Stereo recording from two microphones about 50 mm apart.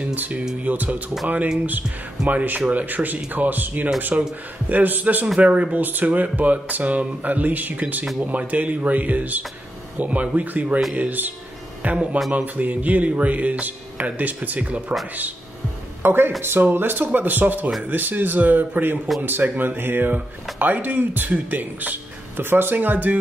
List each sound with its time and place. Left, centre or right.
0.0 s speech: right
2.2 s speech: right
5.4 s speech: right
5.9 s speech: right
16.0 s speech: right
22.4 s speech: right